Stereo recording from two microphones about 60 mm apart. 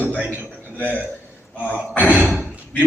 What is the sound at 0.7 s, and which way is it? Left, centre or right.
A man's voice, left.